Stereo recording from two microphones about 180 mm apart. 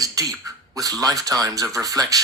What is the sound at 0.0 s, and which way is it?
Speech, 20° right (ahead or behind).